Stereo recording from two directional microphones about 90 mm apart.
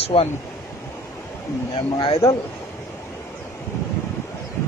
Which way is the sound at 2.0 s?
90° left.